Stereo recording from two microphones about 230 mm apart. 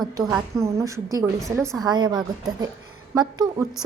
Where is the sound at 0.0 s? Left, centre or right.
Centre.